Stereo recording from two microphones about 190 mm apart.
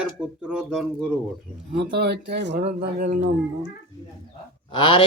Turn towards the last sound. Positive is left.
turn(degrees=25)  # may be behind; listen again after turning